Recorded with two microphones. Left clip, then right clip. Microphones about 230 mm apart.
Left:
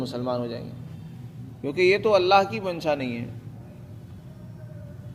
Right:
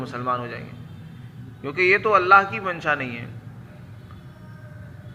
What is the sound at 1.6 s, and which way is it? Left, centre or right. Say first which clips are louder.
Speech: right 2 dB; left.